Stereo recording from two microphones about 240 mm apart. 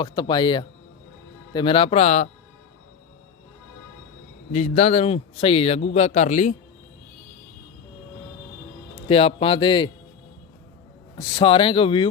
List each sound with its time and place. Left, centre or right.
0.0 s a man's voice: centre
4.5 s a man's voice: left
9.0 s a man's voice: left
11.2 s a man's voice: centre